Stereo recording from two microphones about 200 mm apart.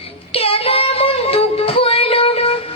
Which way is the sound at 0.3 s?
30° left (ahead or behind).